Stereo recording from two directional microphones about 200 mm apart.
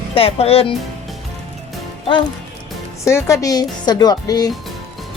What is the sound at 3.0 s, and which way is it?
A woman's voice, 15° left (ahead or behind).